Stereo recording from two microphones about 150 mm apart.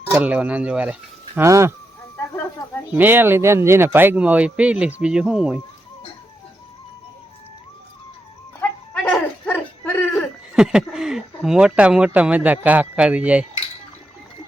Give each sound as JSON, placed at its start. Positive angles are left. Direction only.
{"t": 0.1, "sound": "speech", "side_deg": -10}
{"t": 1.4, "sound": "speech", "side_deg": -20}
{"t": 2.9, "sound": "speech", "side_deg": -15}
{"t": 8.9, "sound": "a sound", "side_deg": 10}
{"t": 10.2, "sound": "speech", "side_deg": -5}